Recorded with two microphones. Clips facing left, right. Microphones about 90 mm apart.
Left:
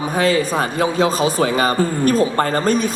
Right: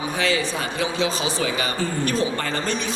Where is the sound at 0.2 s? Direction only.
45° left (ahead or behind).